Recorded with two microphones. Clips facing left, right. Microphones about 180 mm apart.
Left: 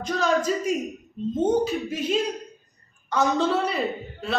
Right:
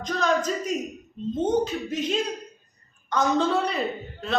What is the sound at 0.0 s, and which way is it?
A man's voice, 10° left (ahead or behind).